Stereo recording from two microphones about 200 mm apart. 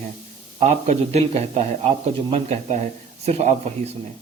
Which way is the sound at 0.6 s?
30° right (ahead or behind).